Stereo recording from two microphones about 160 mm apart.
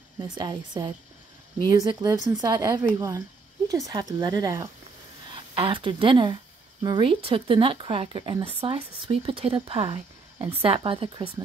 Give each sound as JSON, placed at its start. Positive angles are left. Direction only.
{"t": 0.2, "sound": "a woman's voice", "side_deg": -25}
{"t": 5.3, "sound": "speech", "side_deg": -35}